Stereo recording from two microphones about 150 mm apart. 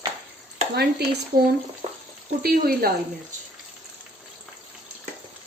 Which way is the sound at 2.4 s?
85° right.